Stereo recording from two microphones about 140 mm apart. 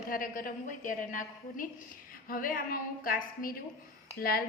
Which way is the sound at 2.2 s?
85° left.